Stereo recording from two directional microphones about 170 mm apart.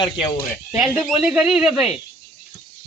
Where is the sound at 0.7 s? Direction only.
5° right (ahead or behind).